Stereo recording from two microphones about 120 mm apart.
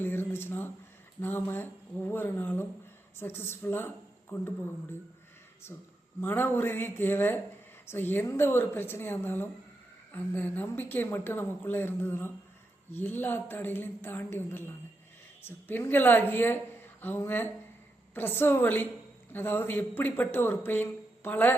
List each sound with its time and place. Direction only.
0.0 s a sound: 20° left (ahead or behind)
1.2 s a woman's voice: 20° left (ahead or behind)
6.2 s a woman's voice: 20° left (ahead or behind)